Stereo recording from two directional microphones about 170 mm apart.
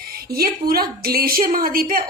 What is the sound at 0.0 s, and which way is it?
A woman's voice, 65° right (ahead or behind).